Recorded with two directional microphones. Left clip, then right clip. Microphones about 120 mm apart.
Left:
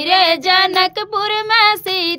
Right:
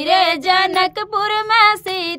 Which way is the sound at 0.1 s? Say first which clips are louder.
Left 1 dB; 15° left (ahead or behind).